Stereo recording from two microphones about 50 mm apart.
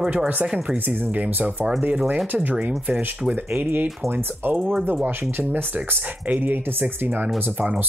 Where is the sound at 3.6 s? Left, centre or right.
Right.